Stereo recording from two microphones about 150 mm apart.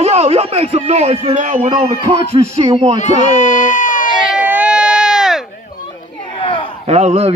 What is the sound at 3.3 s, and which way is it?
Baby cry, 55° left (ahead or behind).